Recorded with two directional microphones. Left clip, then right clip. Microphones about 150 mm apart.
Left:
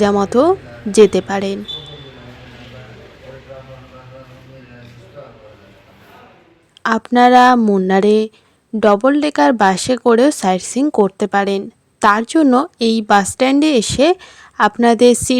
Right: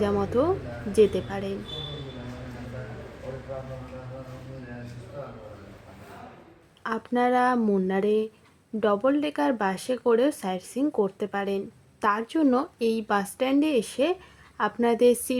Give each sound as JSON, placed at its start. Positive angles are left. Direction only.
{"t": 0.0, "sound": "speech", "side_deg": 65}
{"t": 6.8, "sound": "speech", "side_deg": 70}
{"t": 7.9, "sound": "speech", "side_deg": 70}